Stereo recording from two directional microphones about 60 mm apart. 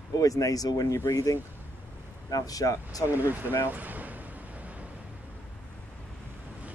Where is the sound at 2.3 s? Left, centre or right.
Left.